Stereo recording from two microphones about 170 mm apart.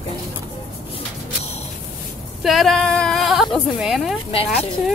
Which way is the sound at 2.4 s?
Centre (ahead or behind).